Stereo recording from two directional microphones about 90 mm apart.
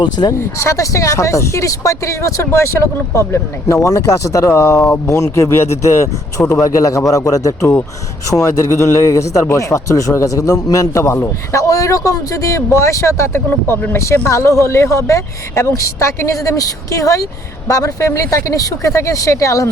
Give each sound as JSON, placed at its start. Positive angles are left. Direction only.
{"t": 0.0, "sound": "speech", "side_deg": 55}
{"t": 0.3, "sound": "a man's voice", "side_deg": 35}